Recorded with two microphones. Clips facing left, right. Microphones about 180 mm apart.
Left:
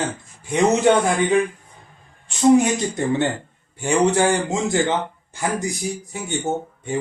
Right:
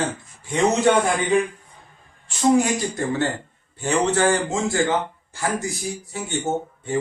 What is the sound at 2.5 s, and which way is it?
A man's voice, 20° left (ahead or behind).